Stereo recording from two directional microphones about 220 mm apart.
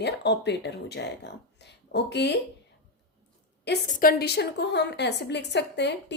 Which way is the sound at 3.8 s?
40° left (ahead or behind).